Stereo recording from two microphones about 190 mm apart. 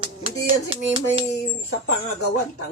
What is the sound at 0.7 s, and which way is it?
Speech, 30° right (ahead or behind).